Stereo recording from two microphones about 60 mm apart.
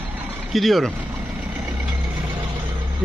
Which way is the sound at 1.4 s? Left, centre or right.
Right.